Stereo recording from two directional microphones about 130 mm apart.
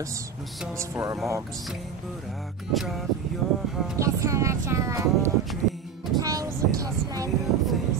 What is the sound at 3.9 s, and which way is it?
Speech, 25° right (ahead or behind).